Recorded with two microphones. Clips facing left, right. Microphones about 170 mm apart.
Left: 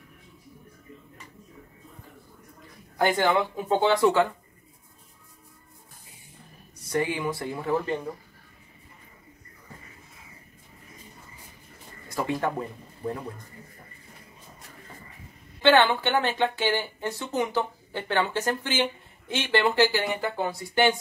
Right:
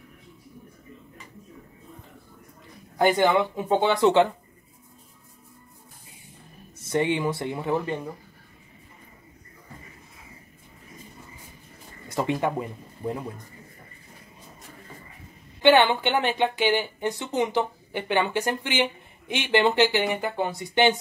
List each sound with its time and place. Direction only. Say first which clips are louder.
3.0 s speech: right 3 dB; 20° right (ahead or behind)
6.8 s speech: right 3 dB; 25° right (ahead or behind)
12.1 s speech: right 2 dB; 20° right (ahead or behind)
15.6 s speech: right 2 dB; 15° right (ahead or behind)